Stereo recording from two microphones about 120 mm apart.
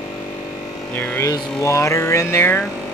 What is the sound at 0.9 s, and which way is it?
Speech, 15° left (ahead or behind).